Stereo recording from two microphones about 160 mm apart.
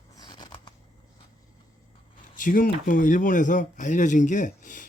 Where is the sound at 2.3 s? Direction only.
55° left (ahead or behind).